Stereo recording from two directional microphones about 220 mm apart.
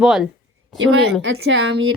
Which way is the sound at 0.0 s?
Centre (ahead or behind).